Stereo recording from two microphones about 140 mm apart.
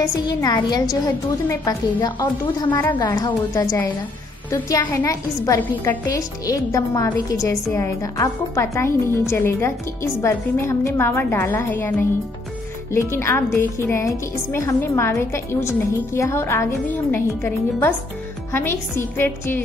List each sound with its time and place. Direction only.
0.0 s a woman's voice: 25° left (ahead or behind)
13.1 s a woman's voice: 20° left (ahead or behind)